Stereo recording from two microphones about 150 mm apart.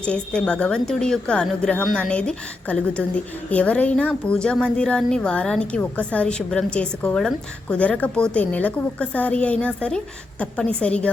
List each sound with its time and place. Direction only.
0.0 s a woman's voice: 5° left (ahead or behind)